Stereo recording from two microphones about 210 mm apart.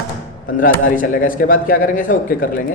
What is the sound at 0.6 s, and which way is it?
A man's voice, 40° left (ahead or behind).